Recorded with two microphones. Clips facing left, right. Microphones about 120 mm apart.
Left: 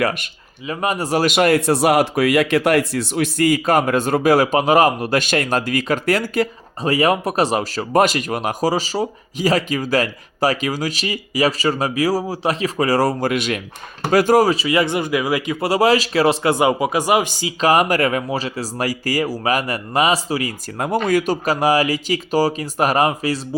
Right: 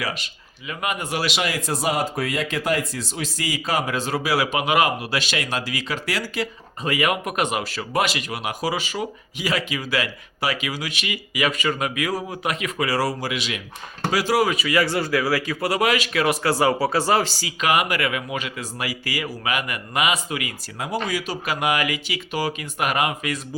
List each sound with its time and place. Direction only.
0.0 s speech: 55° left (ahead or behind)
0.7 s speech: 35° left (ahead or behind)
14.5 s speech: 25° left (ahead or behind)
17.6 s speech: 40° left (ahead or behind)
20.7 s speech: 50° left (ahead or behind)
21.4 s speech: 35° left (ahead or behind)